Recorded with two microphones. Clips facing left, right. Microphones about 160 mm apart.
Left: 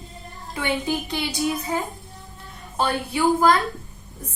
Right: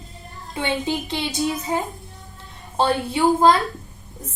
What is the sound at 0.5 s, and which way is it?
A woman's voice, 25° right (ahead or behind).